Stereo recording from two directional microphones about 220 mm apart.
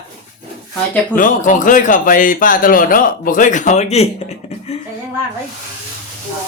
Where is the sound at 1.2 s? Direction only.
35° left (ahead or behind).